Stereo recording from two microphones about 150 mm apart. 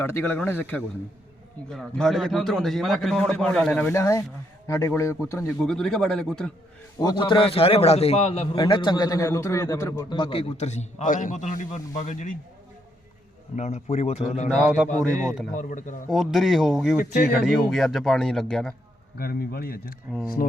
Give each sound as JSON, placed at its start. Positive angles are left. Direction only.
{"t": 0.0, "sound": "a man's voice", "side_deg": 15}
{"t": 1.7, "sound": "a man's voice", "side_deg": 0}
{"t": 3.9, "sound": "a man's voice", "side_deg": 20}
{"t": 5.5, "sound": "a man's voice", "side_deg": 0}
{"t": 7.0, "sound": "a man's voice", "side_deg": 30}
{"t": 8.6, "sound": "a man's voice", "side_deg": 30}
{"t": 13.6, "sound": "a man's voice", "side_deg": 45}
{"t": 14.5, "sound": "a man's voice", "side_deg": -5}
{"t": 14.8, "sound": "a man's voice", "side_deg": 55}
{"t": 16.0, "sound": "a man's voice", "side_deg": 0}
{"t": 19.1, "sound": "speech", "side_deg": 80}